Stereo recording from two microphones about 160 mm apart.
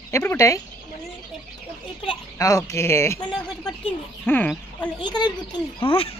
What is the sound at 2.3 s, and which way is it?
Speech, 20° left (ahead or behind).